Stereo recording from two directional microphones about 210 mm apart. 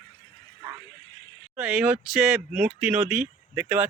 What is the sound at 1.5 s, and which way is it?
Speech, 5° right (ahead or behind).